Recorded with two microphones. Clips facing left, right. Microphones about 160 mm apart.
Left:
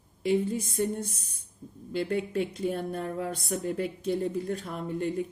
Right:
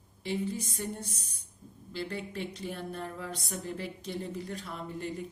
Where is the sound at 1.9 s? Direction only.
50° left (ahead or behind).